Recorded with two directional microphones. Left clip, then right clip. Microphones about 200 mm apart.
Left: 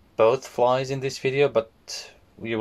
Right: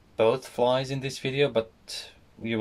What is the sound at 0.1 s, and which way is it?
Speech, 40° left (ahead or behind).